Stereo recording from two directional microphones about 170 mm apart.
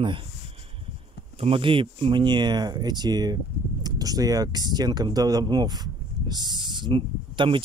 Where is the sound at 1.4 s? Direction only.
30° right (ahead or behind).